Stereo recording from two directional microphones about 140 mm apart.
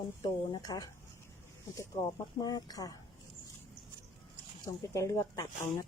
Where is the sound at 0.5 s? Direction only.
30° left (ahead or behind).